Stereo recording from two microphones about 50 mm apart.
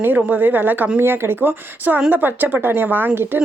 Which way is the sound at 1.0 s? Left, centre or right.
Right.